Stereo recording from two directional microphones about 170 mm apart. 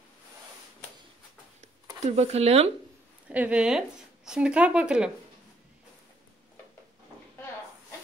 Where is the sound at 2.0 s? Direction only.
40° right (ahead or behind).